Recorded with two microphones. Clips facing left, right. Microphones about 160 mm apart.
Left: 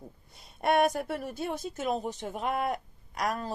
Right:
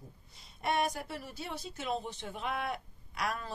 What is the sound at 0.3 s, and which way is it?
A woman's voice, 55° left (ahead or behind).